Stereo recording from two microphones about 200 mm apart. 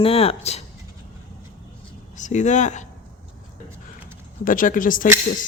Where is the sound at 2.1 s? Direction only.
35° left (ahead or behind).